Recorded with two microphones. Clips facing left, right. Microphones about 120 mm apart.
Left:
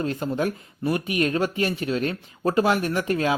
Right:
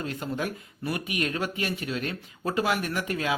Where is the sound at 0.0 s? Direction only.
35° left (ahead or behind).